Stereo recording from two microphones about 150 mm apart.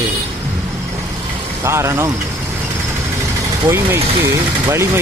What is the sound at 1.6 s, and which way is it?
Speech, 20° right (ahead or behind).